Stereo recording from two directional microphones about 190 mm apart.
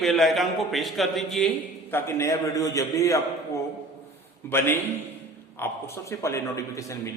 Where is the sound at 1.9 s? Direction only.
10° left (ahead or behind).